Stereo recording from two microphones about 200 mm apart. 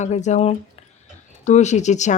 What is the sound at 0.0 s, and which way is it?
Speech, 35° left (ahead or behind).